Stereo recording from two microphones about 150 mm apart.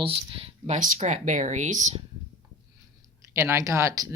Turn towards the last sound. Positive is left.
turn(degrees=-20)  # may be behind; listen again after turning